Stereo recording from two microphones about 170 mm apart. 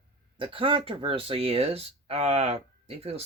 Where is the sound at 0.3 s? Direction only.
30° right (ahead or behind).